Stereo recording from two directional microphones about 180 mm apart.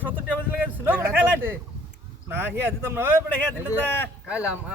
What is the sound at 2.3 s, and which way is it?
Speech, 10° right (ahead or behind).